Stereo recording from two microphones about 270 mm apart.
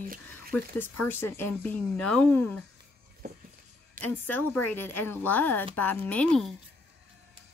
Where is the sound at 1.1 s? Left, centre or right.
Centre.